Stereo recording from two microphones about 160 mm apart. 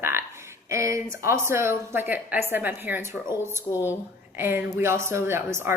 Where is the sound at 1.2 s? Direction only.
15° right (ahead or behind).